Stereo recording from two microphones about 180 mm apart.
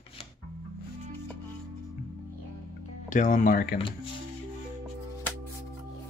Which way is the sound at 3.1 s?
45° left (ahead or behind).